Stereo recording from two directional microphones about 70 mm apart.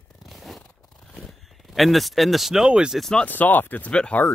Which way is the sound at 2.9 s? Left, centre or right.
Centre.